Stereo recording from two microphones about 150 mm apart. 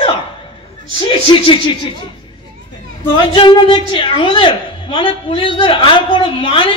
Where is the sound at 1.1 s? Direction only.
35° left (ahead or behind).